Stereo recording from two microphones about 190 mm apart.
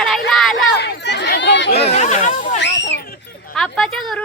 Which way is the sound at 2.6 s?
65° left (ahead or behind).